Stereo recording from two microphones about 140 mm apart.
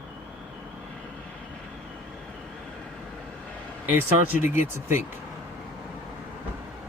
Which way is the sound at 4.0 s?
15° right (ahead or behind).